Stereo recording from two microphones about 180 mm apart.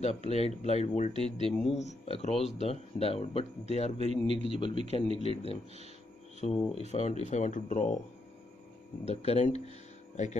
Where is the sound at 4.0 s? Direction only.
35° right (ahead or behind).